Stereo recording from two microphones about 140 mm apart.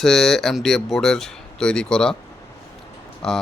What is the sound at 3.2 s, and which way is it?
Speech, 5° left (ahead or behind).